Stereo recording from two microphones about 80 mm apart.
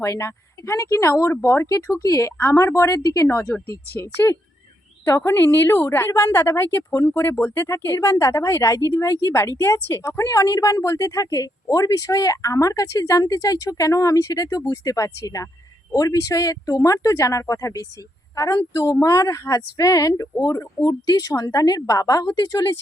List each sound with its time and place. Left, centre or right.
0.0 s speech: left
2.4 s speech: left